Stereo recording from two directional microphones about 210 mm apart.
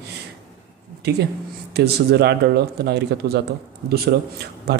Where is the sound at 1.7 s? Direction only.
50° right (ahead or behind).